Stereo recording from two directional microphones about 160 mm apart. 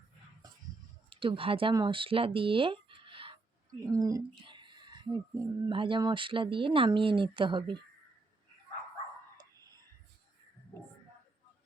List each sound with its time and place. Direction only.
1.1 s speech: 30° right (ahead or behind)
3.9 s speech: 20° right (ahead or behind)
9.4 s whispering: 25° right (ahead or behind)